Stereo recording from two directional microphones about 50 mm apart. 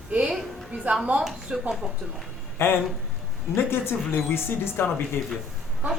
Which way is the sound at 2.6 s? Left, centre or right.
Left.